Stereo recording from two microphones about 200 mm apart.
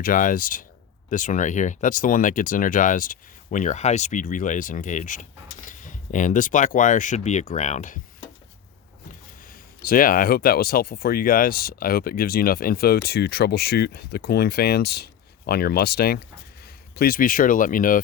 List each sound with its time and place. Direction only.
0.0 s speech: 40° left (ahead or behind)
9.8 s speech: 45° left (ahead or behind)